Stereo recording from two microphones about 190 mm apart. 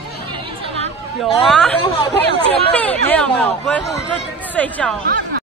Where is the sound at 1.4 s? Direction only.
Centre (ahead or behind).